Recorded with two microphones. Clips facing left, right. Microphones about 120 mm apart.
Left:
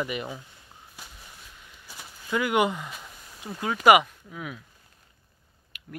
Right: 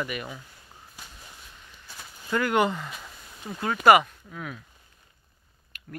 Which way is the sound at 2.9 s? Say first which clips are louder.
Right 1 dB; centre (ahead or behind).